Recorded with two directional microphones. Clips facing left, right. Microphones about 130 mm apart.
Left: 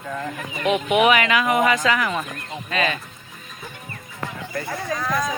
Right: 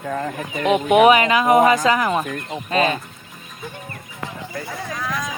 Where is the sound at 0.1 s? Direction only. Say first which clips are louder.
Right 4 dB; 45° right (ahead or behind).